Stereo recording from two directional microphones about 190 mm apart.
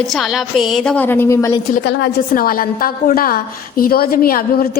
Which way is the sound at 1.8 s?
60° left (ahead or behind).